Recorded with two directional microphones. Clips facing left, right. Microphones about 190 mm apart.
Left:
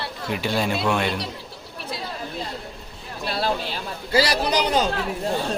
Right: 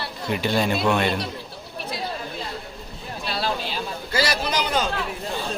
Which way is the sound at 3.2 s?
50° left (ahead or behind).